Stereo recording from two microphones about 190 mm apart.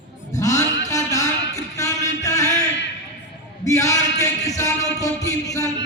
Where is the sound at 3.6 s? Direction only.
15° left (ahead or behind).